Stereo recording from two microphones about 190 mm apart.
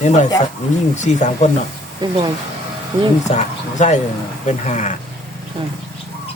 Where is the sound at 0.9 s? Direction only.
40° left (ahead or behind).